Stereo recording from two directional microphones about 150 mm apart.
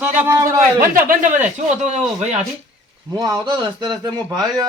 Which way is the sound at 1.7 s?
50° right (ahead or behind).